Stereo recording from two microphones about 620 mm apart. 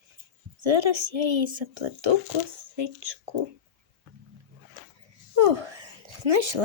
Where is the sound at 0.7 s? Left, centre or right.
Right.